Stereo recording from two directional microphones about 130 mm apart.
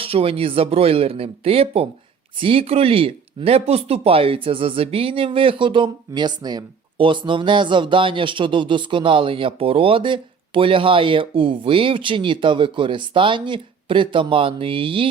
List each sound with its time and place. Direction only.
0.0 s speech: 45° right (ahead or behind)